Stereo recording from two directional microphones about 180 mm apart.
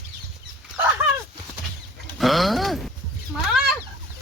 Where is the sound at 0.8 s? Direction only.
10° right (ahead or behind).